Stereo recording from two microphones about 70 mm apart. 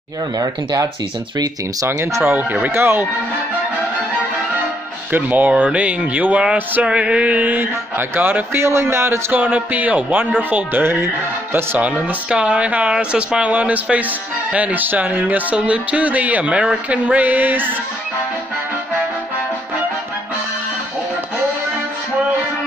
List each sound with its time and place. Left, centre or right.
1.9 s a man's voice: right
2.3 s speech: right
2.7 s a man's voice: right
5.1 s speech: right
8.5 s a man's voice: right
9.3 s a man's voice: right
12.3 s speech: centre